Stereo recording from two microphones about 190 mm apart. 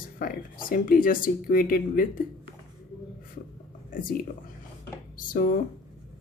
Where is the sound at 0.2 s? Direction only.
50° left (ahead or behind).